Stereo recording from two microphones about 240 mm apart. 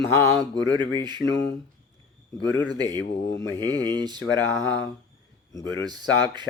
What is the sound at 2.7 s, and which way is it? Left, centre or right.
Speech, centre.